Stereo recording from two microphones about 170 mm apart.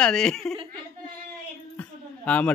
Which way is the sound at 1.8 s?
10° left (ahead or behind).